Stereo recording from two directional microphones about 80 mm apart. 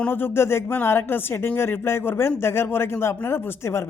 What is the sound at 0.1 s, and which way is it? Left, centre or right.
Speech, left.